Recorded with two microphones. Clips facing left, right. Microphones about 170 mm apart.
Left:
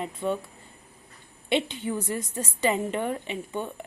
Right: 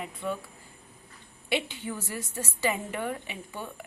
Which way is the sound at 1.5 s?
15° left (ahead or behind).